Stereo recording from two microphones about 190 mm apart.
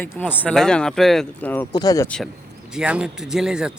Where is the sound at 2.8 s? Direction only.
5° right (ahead or behind).